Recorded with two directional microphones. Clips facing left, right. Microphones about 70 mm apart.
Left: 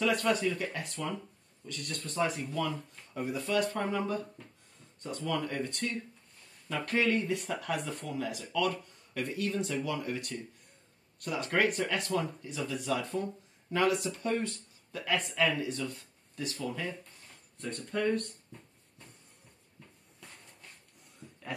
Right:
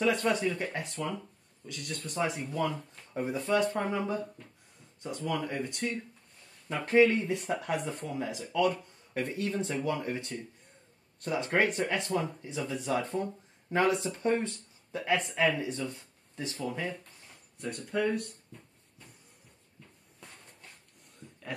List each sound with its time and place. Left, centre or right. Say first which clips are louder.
0.0 s speech: right 1 dB; right
1.7 s speech: right 1 dB; centre
5.0 s speech: right 1 dB; centre; by 16.8 s right
17.6 s speech: right 2 dB; centre